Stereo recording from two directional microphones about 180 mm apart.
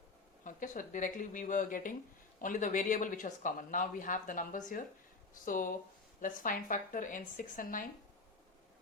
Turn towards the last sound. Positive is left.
turn(degrees=50)  # may be behind; listen again after turning